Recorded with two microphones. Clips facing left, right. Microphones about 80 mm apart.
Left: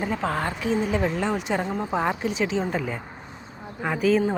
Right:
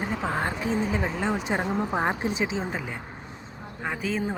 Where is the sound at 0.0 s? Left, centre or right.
Centre.